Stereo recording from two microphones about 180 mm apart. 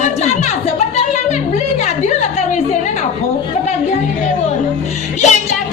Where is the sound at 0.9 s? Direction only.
40° left (ahead or behind).